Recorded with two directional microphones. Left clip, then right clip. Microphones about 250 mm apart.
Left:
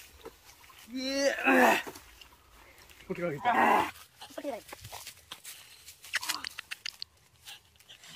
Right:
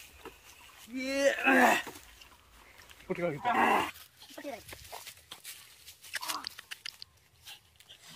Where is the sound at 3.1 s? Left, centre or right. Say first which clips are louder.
Right 1 dB; centre.